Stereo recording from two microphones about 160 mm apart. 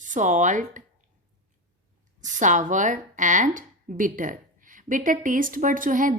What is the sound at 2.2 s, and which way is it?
A woman's voice, 50° right (ahead or behind).